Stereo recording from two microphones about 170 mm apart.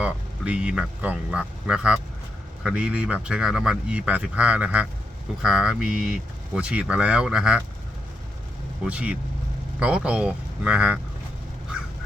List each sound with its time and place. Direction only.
0.0 s speech: 5° right (ahead or behind)
8.8 s speech: 5° right (ahead or behind)